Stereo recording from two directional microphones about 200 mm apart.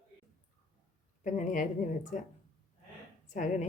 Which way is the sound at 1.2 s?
40° left (ahead or behind).